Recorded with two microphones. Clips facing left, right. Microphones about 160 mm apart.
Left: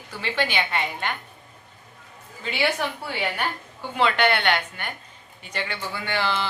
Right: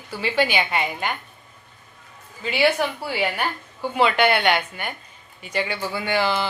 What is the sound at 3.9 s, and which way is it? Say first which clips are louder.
Speech: right 3 dB; 10° right (ahead or behind).